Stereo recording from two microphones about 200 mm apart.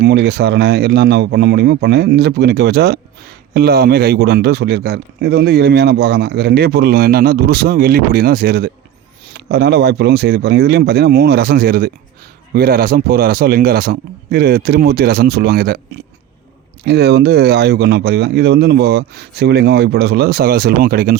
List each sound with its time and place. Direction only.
0.0 s a man's voice: 55° right (ahead or behind)
16.8 s a man's voice: 55° right (ahead or behind)